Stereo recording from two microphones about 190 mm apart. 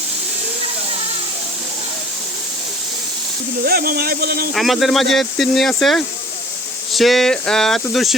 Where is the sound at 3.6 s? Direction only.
50° right (ahead or behind).